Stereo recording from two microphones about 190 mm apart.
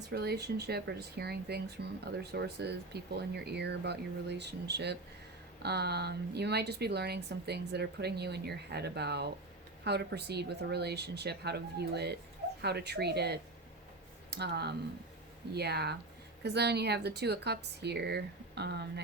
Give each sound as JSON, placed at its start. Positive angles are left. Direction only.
{"t": 0.1, "sound": "a woman's voice", "side_deg": -60}